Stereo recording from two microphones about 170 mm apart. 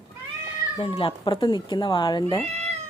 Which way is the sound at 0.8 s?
35° left (ahead or behind).